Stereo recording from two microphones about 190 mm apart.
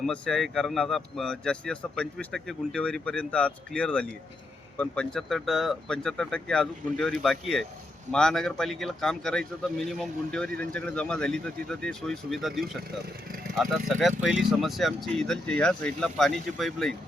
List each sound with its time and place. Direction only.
0.0 s a man's voice: centre (ahead or behind)